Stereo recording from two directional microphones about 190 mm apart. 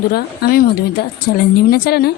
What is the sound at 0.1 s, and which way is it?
Speech, 55° left (ahead or behind).